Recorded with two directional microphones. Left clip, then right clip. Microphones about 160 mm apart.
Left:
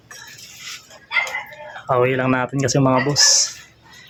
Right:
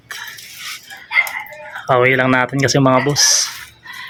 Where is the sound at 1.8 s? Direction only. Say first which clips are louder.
Right 5 dB; 5° right (ahead or behind).